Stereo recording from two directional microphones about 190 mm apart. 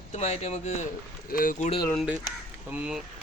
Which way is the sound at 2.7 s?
5° right (ahead or behind).